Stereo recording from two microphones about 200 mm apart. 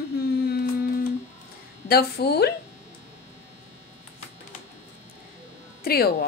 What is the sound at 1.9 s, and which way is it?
Speech, 50° left (ahead or behind).